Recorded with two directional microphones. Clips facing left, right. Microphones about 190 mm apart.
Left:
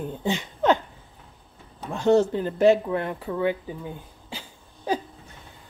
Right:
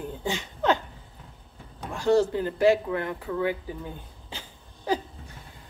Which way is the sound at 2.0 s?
20° left (ahead or behind).